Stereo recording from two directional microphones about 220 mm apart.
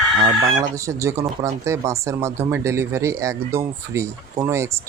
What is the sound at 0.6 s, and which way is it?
Speech, 15° right (ahead or behind).